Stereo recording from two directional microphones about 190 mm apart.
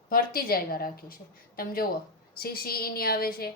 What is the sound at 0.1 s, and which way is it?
A woman's voice, 50° left (ahead or behind).